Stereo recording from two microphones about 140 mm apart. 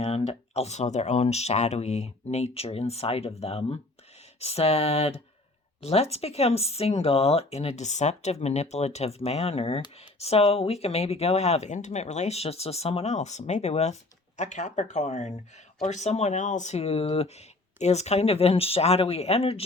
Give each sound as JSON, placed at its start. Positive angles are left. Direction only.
{"t": 0.0, "sound": "speech", "side_deg": 45}